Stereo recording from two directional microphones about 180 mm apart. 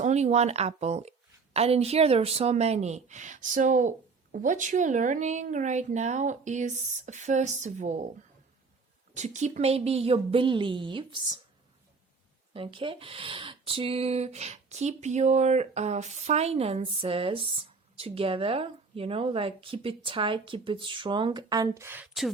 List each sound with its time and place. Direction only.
0.0 s speech: 40° right (ahead or behind)
9.1 s speech: 40° right (ahead or behind)
12.5 s speech: 30° right (ahead or behind)
22.0 s speech: centre (ahead or behind)